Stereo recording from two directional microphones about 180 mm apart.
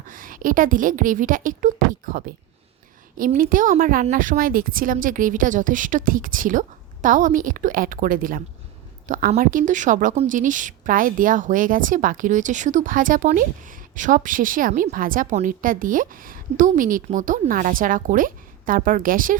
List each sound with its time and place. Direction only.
0.1 s a woman's voice: 50° right (ahead or behind)